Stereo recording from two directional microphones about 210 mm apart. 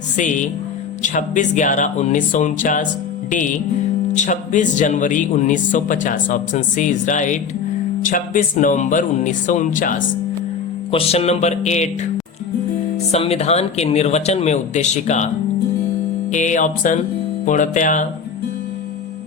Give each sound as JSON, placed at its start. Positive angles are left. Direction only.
{"t": 0.2, "sound": "speech", "side_deg": 35}
{"t": 10.9, "sound": "speech", "side_deg": 30}
{"t": 13.1, "sound": "speech", "side_deg": 30}
{"t": 16.3, "sound": "speech", "side_deg": 35}